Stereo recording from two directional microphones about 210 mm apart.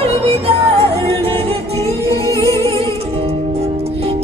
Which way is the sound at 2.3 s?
15° left (ahead or behind).